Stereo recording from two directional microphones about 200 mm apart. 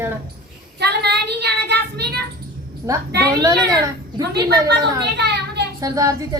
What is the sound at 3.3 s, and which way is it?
Speech, 20° right (ahead or behind).